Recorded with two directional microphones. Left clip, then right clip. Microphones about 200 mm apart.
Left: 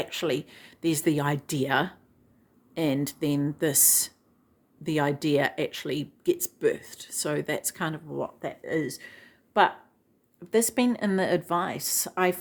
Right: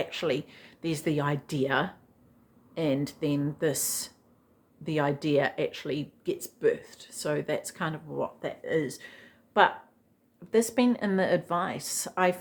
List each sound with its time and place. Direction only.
0.0 s speech: 40° left (ahead or behind)